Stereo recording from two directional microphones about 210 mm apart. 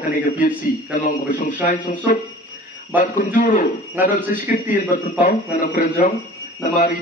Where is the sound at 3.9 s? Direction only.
10° right (ahead or behind).